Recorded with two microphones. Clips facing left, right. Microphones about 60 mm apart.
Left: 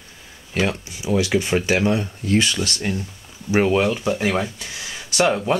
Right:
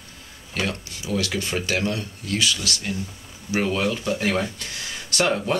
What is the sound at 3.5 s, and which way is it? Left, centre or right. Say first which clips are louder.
Speech: left 5 dB; left.